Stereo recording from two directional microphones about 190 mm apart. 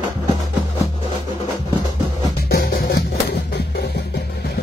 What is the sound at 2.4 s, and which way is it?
Music, 50° left (ahead or behind).